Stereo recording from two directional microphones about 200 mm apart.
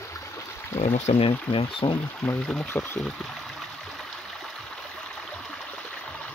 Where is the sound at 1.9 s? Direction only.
5° left (ahead or behind).